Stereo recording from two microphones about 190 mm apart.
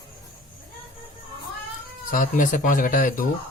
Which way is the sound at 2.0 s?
45° left (ahead or behind).